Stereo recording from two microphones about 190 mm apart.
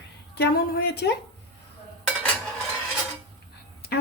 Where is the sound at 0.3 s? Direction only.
55° left (ahead or behind).